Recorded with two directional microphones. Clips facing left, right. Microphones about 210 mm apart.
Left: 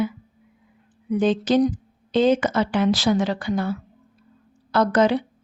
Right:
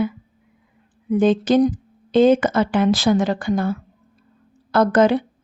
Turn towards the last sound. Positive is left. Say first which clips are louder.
# right 3 dB
turn(degrees=-50)  # may be behind; listen again after turning